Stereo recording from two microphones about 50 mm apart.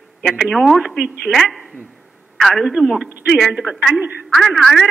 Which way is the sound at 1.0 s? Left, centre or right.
Centre.